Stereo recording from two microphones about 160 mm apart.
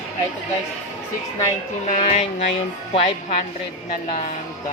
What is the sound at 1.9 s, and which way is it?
A woman's voice, 45° left (ahead or behind).